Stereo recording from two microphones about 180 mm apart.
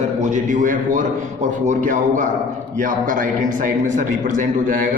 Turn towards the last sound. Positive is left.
turn(degrees=-50)  # may be behind; listen again after turning